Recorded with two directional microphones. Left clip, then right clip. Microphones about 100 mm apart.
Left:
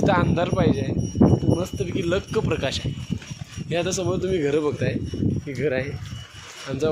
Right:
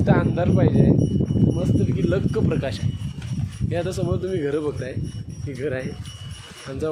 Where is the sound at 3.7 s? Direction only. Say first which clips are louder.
Left 2 dB; 20° left (ahead or behind).